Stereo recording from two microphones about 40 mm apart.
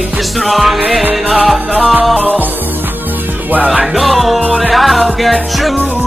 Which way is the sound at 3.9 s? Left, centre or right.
Centre.